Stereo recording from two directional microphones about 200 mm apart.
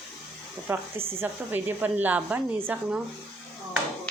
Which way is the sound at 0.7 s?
10° right (ahead or behind).